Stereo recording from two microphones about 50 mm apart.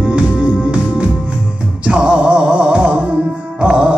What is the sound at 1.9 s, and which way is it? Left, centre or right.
Music, right.